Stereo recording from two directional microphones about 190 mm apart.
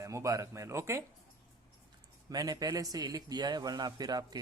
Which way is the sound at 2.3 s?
20° right (ahead or behind).